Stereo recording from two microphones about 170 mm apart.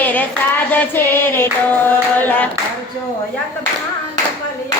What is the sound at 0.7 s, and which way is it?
Singing, 15° left (ahead or behind).